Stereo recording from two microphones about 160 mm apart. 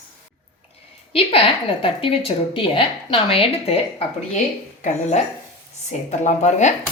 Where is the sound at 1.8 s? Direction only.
35° left (ahead or behind).